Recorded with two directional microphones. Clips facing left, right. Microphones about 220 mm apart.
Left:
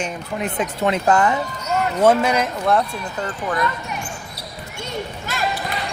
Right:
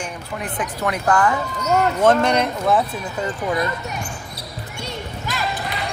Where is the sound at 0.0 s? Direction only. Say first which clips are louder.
Left 4 dB; 20° left (ahead or behind).